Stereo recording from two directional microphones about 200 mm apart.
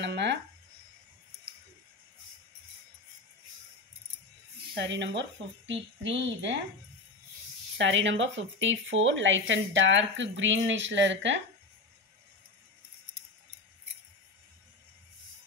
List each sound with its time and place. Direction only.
0.0 s a sound: 60° right (ahead or behind)
4.7 s speech: 60° right (ahead or behind)
7.7 s speech: 65° right (ahead or behind)